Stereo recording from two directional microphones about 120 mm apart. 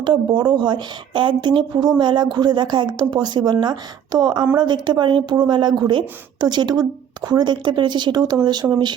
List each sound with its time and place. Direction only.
0.0 s speech: 40° right (ahead or behind)
8.6 s speech: 15° right (ahead or behind)